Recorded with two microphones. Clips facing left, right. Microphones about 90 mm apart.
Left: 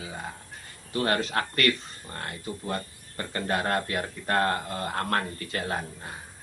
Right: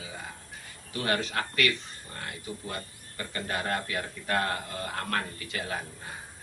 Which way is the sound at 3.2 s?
40° left (ahead or behind).